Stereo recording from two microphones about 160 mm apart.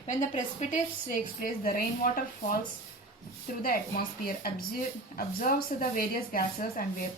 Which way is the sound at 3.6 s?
65° left (ahead or behind).